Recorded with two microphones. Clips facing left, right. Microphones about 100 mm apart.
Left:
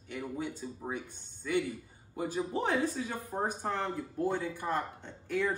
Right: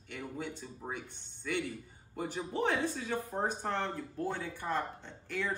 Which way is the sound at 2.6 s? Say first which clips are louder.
Right 1 dB; 5° left (ahead or behind).